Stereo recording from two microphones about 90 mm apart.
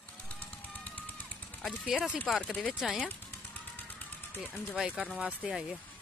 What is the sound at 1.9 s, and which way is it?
Speech, 10° right (ahead or behind).